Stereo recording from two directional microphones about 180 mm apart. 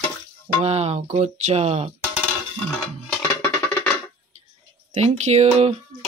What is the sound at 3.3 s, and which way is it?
Music, 15° left (ahead or behind).